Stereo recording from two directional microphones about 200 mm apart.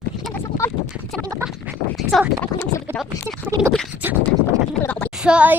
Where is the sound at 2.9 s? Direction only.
10° right (ahead or behind).